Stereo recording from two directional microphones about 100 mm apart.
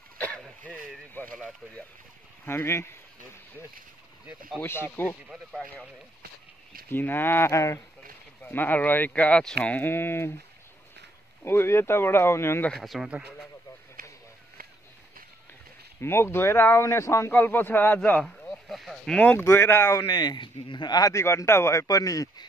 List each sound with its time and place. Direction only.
0.4 s throat clearing: centre (ahead or behind)
1.2 s radio: 20° left (ahead or behind)
2.4 s a man's voice: 25° left (ahead or behind)
4.6 s a man's voice: 20° left (ahead or behind)
6.9 s a man's voice: 20° left (ahead or behind)
11.4 s a man's voice: 25° left (ahead or behind)
12.6 s speech: 5° left (ahead or behind)
16.0 s a man's voice: 25° left (ahead or behind)
18.2 s a sound: centre (ahead or behind)
19.4 s a man's voice: 25° left (ahead or behind); by 21.1 s 45° left (ahead or behind)
21.1 s a man's voice: 30° left (ahead or behind)